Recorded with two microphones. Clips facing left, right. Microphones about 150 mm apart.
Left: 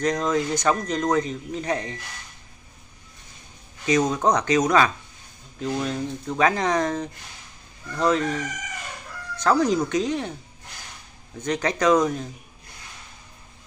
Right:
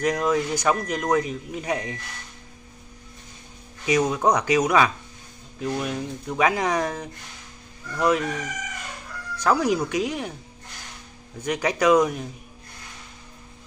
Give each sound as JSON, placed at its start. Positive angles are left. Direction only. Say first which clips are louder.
{"t": 0.0, "sound": "speech", "louder": "even", "side_deg": -10}
{"t": 3.8, "sound": "speech", "louder": "even", "side_deg": -10}
{"t": 9.4, "sound": "speech", "louder": "left 1 dB", "side_deg": -10}
{"t": 11.4, "sound": "speech", "louder": "even", "side_deg": -10}